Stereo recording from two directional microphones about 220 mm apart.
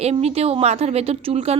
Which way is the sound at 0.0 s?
30° right (ahead or behind).